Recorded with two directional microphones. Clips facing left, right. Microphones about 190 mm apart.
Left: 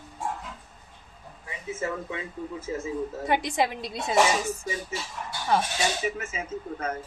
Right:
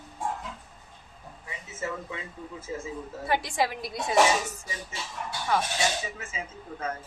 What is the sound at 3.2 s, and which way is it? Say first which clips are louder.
Speech: left 1 dB; 20° left (ahead or behind).